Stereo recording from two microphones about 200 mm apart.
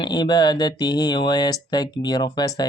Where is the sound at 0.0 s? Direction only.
20° left (ahead or behind).